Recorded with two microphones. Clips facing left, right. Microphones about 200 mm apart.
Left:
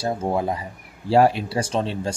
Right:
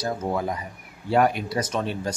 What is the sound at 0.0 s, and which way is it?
Speech, 30° left (ahead or behind).